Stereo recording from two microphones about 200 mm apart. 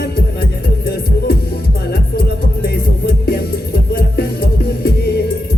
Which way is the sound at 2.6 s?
50° left (ahead or behind).